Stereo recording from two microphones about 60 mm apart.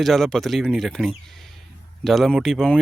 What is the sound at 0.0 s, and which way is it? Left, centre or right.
Speech, centre.